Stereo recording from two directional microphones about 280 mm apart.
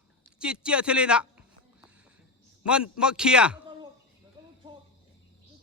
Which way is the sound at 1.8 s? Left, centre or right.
Centre.